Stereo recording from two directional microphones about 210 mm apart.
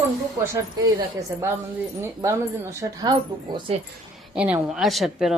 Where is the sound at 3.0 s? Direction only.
20° right (ahead or behind).